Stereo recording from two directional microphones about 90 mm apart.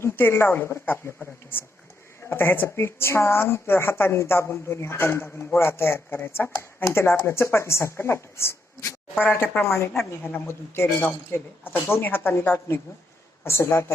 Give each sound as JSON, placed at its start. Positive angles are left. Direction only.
{"t": 0.0, "sound": "a woman's voice", "side_deg": 25}
{"t": 2.3, "sound": "a woman's voice", "side_deg": 25}
{"t": 9.2, "sound": "a woman's voice", "side_deg": 20}